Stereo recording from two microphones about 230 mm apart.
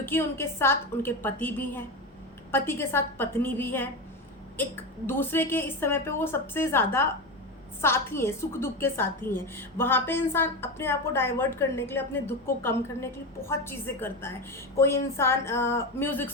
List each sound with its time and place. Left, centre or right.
0.0 s a woman's voice: centre
5.0 s a woman's voice: centre